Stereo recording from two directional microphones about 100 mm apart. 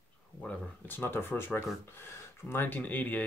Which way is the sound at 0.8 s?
20° left (ahead or behind).